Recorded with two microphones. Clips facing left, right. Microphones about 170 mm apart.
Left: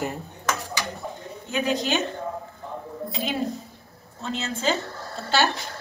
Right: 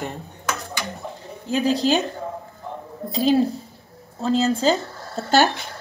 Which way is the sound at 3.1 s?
35° right (ahead or behind).